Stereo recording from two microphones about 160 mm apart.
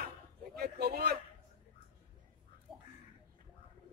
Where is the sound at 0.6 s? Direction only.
75° right (ahead or behind).